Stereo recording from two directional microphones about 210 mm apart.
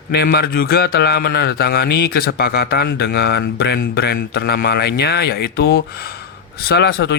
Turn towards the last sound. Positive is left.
turn(degrees=50)  # may be behind; listen again after turning